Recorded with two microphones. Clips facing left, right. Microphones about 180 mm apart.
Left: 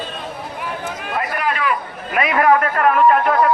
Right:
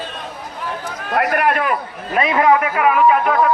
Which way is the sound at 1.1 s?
70° right (ahead or behind).